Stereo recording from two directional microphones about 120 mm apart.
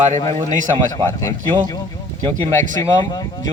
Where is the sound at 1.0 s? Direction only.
40° right (ahead or behind).